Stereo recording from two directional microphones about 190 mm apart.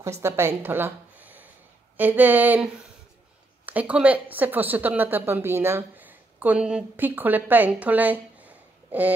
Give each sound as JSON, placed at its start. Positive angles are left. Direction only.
{"t": 0.0, "sound": "speech", "side_deg": -15}
{"t": 2.0, "sound": "a sound", "side_deg": -10}
{"t": 3.6, "sound": "speech", "side_deg": -5}